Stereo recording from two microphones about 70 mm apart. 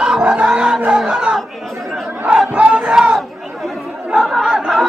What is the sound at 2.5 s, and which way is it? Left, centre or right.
Battle cry, centre.